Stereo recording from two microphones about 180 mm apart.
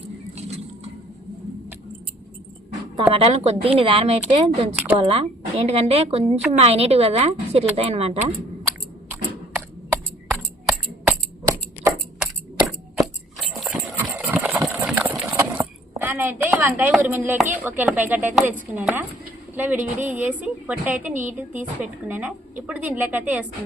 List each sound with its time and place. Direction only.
0.3 s patter: 35° right (ahead or behind)
3.1 s a woman's voice: 35° right (ahead or behind)
10.7 s a sound: 15° right (ahead or behind)
12.2 s a sound: centre (ahead or behind)
14.3 s horse: 10° right (ahead or behind)
17.0 s a woman's voice: 10° right (ahead or behind)